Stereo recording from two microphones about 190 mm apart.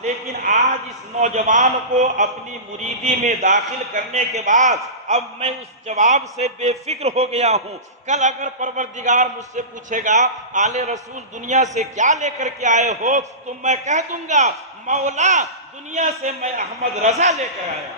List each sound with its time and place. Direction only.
0.0 s a sound: 35° right (ahead or behind)
1.1 s a man's voice: 35° right (ahead or behind)
3.3 s a man's voice: 35° right (ahead or behind)